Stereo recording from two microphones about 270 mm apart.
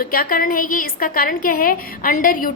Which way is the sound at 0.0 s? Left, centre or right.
Left.